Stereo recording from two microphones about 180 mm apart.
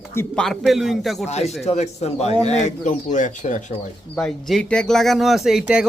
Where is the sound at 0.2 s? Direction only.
5° left (ahead or behind).